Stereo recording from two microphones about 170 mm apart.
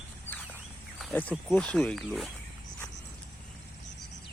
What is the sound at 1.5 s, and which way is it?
Speech, 5° left (ahead or behind).